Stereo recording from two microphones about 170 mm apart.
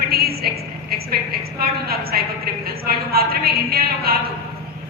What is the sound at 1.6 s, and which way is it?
A woman's voice, 65° right (ahead or behind).